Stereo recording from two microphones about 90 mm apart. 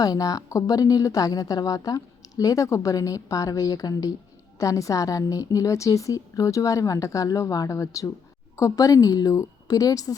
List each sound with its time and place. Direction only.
0.0 s a woman's voice: 40° left (ahead or behind)